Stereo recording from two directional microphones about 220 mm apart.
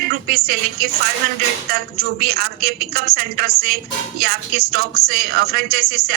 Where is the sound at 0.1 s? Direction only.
45° right (ahead or behind).